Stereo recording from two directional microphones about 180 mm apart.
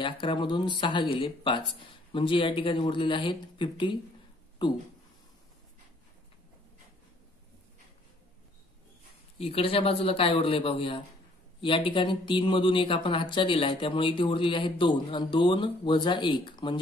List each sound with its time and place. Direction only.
0.0 s speech: 25° left (ahead or behind)
9.4 s a man's voice: 30° left (ahead or behind)